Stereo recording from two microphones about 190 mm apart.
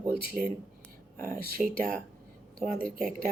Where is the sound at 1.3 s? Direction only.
50° right (ahead or behind).